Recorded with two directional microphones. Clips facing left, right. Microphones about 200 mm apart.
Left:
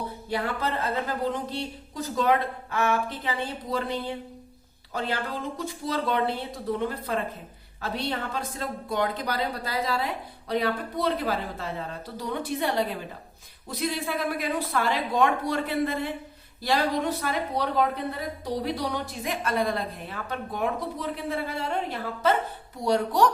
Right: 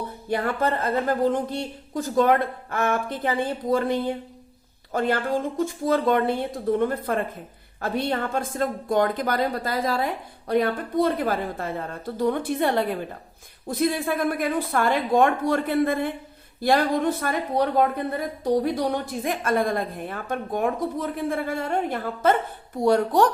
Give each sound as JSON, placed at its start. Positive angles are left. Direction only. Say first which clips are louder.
{"t": 0.3, "sound": "speech", "louder": "right 5 dB", "side_deg": -50}